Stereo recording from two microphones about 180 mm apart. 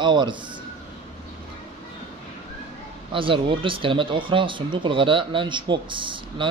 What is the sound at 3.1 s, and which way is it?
Speech, 30° right (ahead or behind).